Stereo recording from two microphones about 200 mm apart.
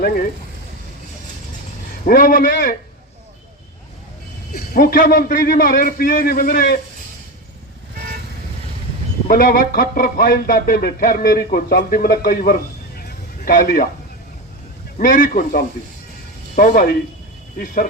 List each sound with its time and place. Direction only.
2.0 s speech: 45° left (ahead or behind)
4.5 s speech: 50° left (ahead or behind)
9.2 s speech: 45° left (ahead or behind)
13.0 s a sound: 45° left (ahead or behind)
14.9 s speech: 40° left (ahead or behind)